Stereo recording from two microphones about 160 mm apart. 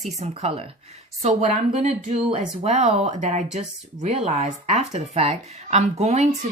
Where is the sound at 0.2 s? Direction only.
40° right (ahead or behind).